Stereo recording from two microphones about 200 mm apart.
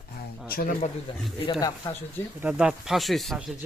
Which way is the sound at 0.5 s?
45° left (ahead or behind).